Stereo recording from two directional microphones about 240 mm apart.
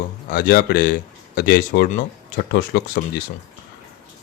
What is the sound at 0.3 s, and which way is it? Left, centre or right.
Speech, left.